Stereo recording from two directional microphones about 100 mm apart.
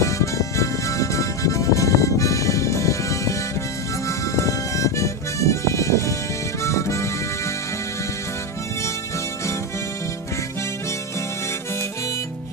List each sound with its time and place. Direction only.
0.0 s music: 30° left (ahead or behind)
4.4 s music: 30° left (ahead or behind)
6.6 s harmonica: 30° left (ahead or behind)